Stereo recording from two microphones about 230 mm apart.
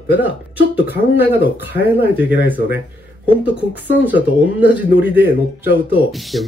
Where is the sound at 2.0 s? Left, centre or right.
Centre.